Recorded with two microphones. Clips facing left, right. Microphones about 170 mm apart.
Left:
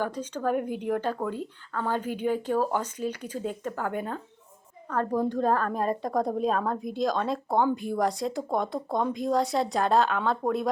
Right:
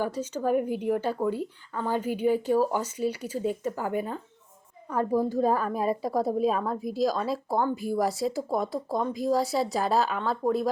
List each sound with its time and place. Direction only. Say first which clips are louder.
0.0 s a woman's voice: right 1 dB; 10° right (ahead or behind)